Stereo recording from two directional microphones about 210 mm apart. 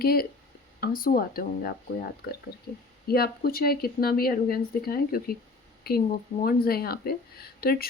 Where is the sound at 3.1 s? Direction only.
45° left (ahead or behind).